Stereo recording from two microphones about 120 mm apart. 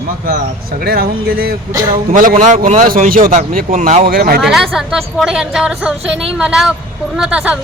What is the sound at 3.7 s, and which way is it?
Speech, 55° right (ahead or behind).